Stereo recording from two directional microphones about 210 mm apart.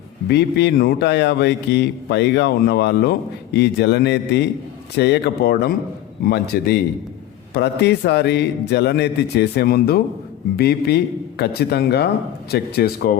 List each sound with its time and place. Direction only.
0.3 s speech: 50° left (ahead or behind)